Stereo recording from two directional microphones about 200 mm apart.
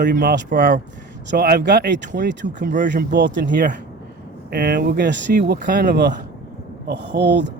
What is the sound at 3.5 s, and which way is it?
Speech, 40° right (ahead or behind).